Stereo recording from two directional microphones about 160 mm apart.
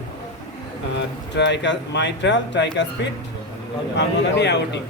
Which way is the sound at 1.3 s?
90° left.